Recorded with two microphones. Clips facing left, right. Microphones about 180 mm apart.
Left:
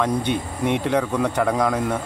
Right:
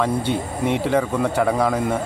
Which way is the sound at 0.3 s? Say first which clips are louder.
Right 1 dB; 60° left (ahead or behind).